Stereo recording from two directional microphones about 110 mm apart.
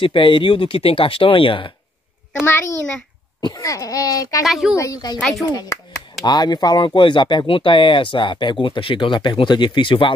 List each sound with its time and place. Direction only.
0.0 s speech: 50° left (ahead or behind)
2.4 s a child's voice: 20° left (ahead or behind)
3.3 s speech: 35° left (ahead or behind)
4.5 s a woman's voice: centre (ahead or behind)
4.7 s speech: 35° left (ahead or behind); by 10.1 s 50° left (ahead or behind)